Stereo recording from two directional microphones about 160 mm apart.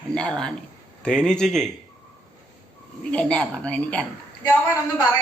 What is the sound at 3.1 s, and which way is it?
Speech, 5° left (ahead or behind).